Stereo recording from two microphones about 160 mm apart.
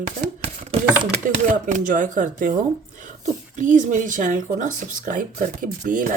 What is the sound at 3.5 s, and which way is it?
Speech, 50° right (ahead or behind).